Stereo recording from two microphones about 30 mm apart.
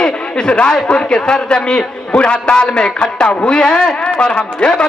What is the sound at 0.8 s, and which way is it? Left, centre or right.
A man's voice, left.